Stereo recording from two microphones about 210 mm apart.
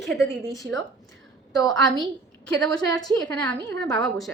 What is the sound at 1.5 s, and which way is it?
A woman's voice, 20° left (ahead or behind).